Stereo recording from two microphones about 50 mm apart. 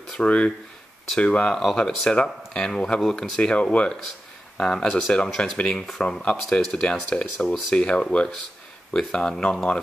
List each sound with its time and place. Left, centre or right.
0.2 s speech: left
1.5 s speech: centre
8.9 s speech: centre